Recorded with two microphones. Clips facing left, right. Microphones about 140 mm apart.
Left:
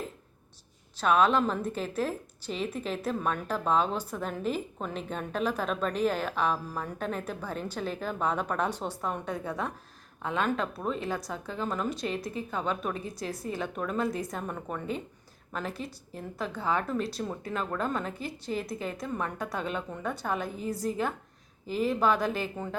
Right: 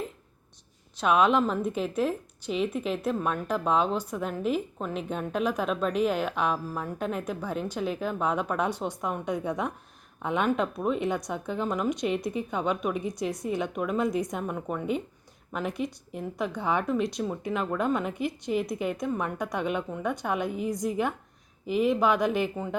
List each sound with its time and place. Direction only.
1.0 s a woman's voice: 10° right (ahead or behind)